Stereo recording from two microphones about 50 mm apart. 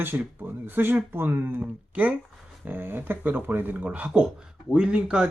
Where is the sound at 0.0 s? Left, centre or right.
Right.